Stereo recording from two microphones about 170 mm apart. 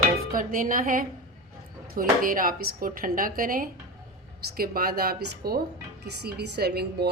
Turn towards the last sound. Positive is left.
turn(degrees=-70)  # may be behind; listen again after turning